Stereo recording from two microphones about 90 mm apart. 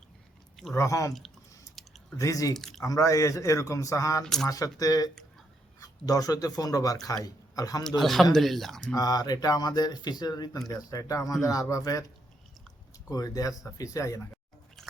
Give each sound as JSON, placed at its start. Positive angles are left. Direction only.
{"t": 0.7, "sound": "a man's voice", "side_deg": 35}
{"t": 1.8, "sound": "a sound", "side_deg": 0}
{"t": 2.1, "sound": "a man's voice", "side_deg": 40}
{"t": 2.6, "sound": "speech", "side_deg": 5}
{"t": 2.8, "sound": "a man's voice", "side_deg": 40}
{"t": 4.2, "sound": "speech", "side_deg": 5}
{"t": 4.4, "sound": "a man's voice", "side_deg": 40}
{"t": 7.9, "sound": "speech", "side_deg": 0}
{"t": 9.0, "sound": "a man's voice", "side_deg": 45}
{"t": 13.1, "sound": "a man's voice", "side_deg": 40}